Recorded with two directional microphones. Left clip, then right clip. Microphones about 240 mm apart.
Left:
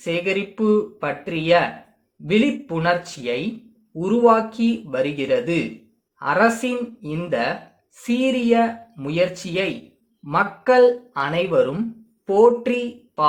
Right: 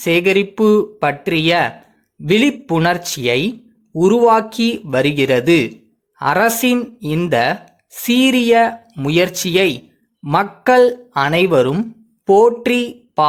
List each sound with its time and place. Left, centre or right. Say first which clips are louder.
0.0 s speech: right 9 dB; right